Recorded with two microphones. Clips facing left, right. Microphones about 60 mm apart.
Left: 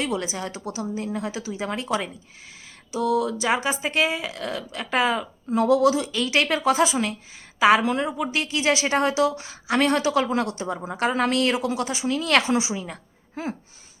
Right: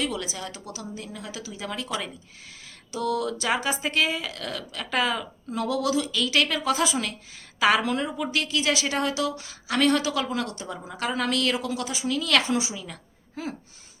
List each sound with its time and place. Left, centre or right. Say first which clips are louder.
0.0 s a woman's voice: left 3 dB; left
2.9 s a woman's voice: left 4 dB; centre; by 13.6 s left